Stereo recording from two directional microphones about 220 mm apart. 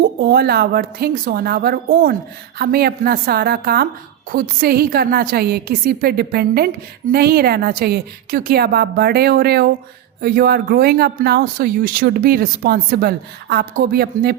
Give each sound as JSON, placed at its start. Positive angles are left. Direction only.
{"t": 0.0, "sound": "speech", "side_deg": -45}